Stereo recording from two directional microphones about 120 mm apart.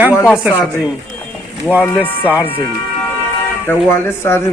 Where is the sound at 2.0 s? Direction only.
15° right (ahead or behind).